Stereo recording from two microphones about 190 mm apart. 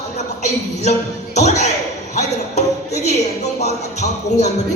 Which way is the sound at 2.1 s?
35° left (ahead or behind).